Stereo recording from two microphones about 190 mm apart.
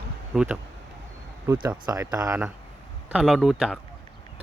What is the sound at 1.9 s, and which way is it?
Speech, 15° right (ahead or behind).